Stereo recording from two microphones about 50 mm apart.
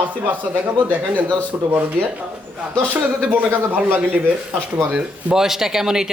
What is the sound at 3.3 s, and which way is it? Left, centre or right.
Speech, right.